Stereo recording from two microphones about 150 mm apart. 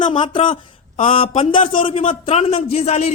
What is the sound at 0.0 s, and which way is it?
A man's voice, 35° left (ahead or behind).